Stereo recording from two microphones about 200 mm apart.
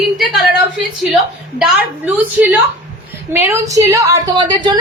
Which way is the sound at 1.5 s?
5° right (ahead or behind).